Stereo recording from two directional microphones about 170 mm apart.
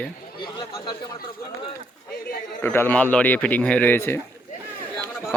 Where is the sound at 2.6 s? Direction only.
15° left (ahead or behind).